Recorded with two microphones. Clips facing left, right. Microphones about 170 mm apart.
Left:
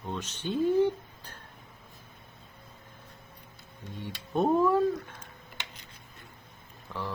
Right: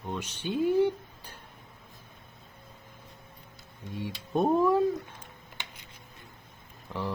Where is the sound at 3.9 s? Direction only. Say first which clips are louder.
Right 1 dB; 15° right (ahead or behind).